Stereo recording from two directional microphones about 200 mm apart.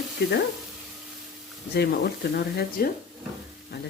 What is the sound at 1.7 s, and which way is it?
Speech, 55° left (ahead or behind).